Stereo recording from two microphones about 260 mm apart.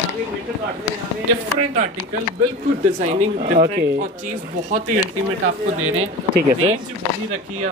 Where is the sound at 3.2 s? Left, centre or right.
Right.